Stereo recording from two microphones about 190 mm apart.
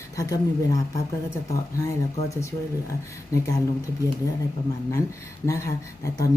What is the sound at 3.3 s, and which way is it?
Speech, 20° left (ahead or behind).